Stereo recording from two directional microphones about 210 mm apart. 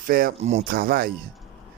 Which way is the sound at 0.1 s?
45° right (ahead or behind).